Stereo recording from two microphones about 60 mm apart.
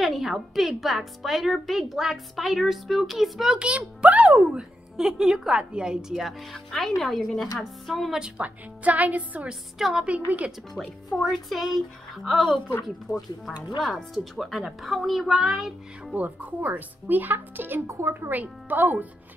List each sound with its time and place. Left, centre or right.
0.0 s speech: centre
3.5 s a woman's voice: centre
4.4 s a woman's voice: centre
8.2 s a woman's voice: right
9.5 s a woman's voice: centre
11.1 s speech: centre
13.1 s speech: left
13.7 s speech: centre
16.2 s speech: right
17.8 s a woman's voice: right
18.3 s a woman's voice: right